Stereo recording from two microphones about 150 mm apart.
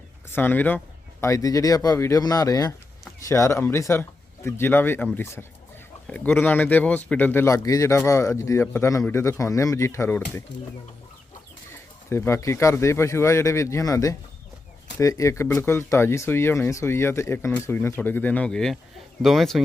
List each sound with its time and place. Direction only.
0.3 s speech: 15° left (ahead or behind)
11.7 s speech: 15° left (ahead or behind); by 19.6 s centre (ahead or behind)